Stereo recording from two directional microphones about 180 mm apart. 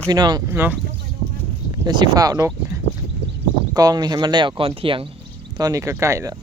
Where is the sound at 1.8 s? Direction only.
25° right (ahead or behind).